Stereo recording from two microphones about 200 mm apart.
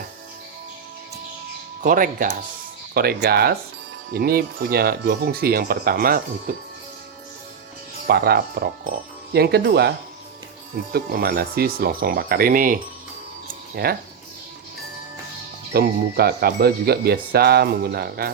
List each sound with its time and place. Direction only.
1.8 s speech: 45° right (ahead or behind)
8.0 s speech: 50° right (ahead or behind)
10.9 s speech: 50° right (ahead or behind)
15.7 s speech: 50° right (ahead or behind)